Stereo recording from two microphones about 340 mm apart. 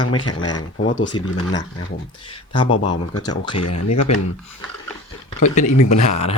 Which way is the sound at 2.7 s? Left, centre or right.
Left.